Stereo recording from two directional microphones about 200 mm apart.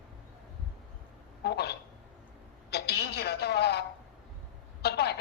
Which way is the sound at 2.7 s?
55° left (ahead or behind).